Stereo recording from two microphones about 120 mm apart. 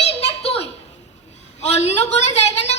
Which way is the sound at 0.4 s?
55° left (ahead or behind).